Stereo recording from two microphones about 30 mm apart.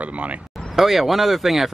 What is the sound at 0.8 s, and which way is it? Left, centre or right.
Speech, centre.